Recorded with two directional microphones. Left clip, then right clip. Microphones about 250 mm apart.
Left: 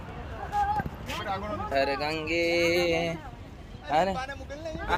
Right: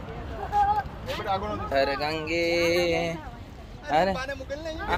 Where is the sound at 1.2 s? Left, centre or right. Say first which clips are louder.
Right 5 dB; right.